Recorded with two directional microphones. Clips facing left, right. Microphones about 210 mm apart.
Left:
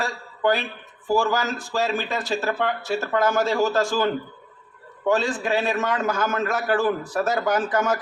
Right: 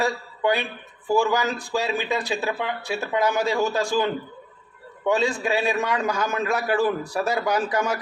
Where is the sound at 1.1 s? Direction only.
15° right (ahead or behind).